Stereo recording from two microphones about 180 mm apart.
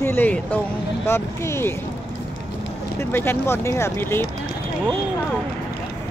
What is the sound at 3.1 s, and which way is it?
Speech, 15° left (ahead or behind).